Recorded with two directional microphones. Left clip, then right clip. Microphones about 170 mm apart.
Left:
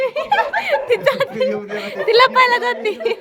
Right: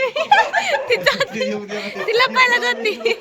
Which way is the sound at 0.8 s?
15° left (ahead or behind).